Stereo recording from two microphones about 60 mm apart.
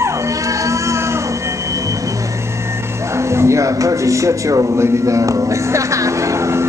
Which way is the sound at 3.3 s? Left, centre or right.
Right.